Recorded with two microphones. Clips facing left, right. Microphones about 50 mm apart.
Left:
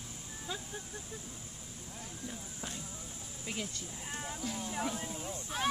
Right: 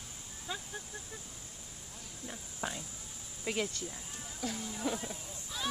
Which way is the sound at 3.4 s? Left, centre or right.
Right.